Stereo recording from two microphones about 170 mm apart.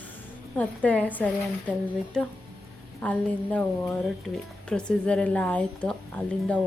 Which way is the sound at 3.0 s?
10° left (ahead or behind).